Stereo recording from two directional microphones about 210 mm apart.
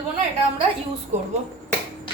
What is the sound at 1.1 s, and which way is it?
Speech, 35° right (ahead or behind).